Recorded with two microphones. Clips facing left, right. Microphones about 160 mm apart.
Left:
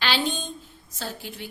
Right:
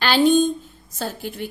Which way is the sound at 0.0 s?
50° right (ahead or behind).